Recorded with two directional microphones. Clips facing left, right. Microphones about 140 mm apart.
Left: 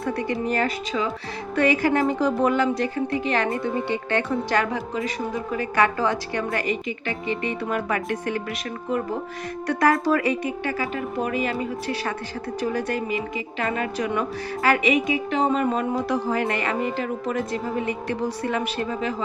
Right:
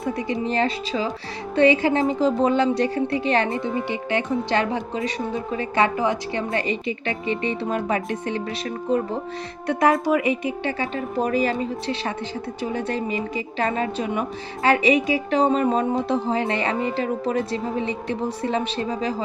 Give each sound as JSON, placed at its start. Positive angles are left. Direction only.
{"t": 0.0, "sound": "a woman's voice", "side_deg": -20}
{"t": 9.6, "sound": "speech", "side_deg": -20}
{"t": 12.7, "sound": "a woman's voice", "side_deg": -30}